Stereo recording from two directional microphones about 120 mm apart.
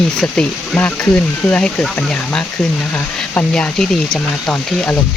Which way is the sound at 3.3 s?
5° left (ahead or behind).